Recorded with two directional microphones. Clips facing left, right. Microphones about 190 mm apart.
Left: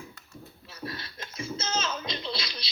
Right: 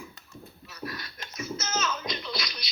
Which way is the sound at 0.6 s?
30° left (ahead or behind).